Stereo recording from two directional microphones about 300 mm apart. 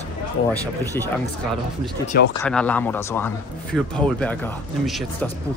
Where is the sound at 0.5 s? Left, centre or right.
Centre.